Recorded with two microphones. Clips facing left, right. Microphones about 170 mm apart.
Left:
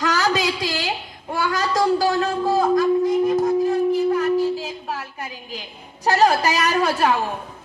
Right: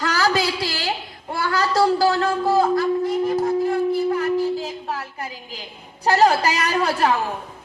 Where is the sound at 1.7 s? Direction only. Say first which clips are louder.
Right 1 dB; 20° left (ahead or behind).